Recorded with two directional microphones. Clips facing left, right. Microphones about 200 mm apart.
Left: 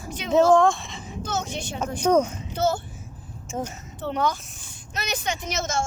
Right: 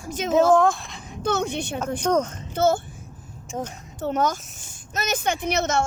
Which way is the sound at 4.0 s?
45° right (ahead or behind).